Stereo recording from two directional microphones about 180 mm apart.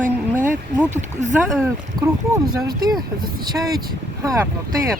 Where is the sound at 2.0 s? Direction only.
25° right (ahead or behind).